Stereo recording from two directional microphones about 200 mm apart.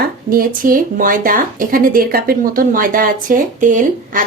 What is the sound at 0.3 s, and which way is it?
Speech, 45° right (ahead or behind).